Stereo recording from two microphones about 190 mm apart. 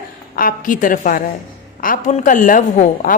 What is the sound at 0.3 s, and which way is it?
A woman's voice, 45° left (ahead or behind).